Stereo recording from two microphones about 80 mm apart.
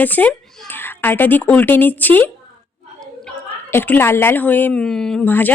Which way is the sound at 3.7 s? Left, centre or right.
Left.